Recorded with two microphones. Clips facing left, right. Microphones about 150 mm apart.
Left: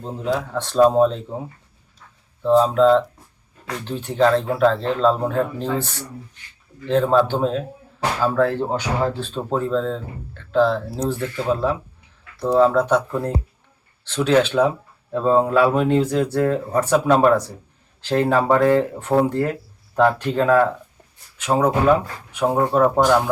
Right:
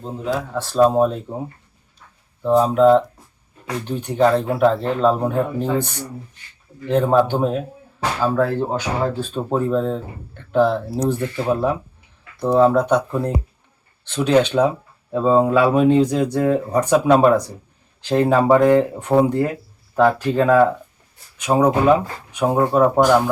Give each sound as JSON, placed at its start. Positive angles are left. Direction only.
{"t": 0.0, "sound": "speech", "side_deg": 0}
{"t": 2.4, "sound": "speech", "side_deg": -10}
{"t": 14.1, "sound": "speech", "side_deg": -15}